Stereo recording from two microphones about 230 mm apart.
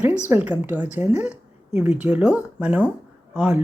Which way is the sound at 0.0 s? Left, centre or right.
Centre.